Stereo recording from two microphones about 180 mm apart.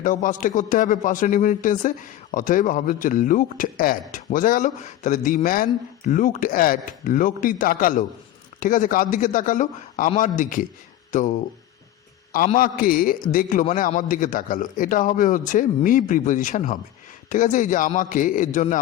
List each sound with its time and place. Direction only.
0.0 s a man's voice: 45° left (ahead or behind)
12.5 s a man's voice: 50° left (ahead or behind)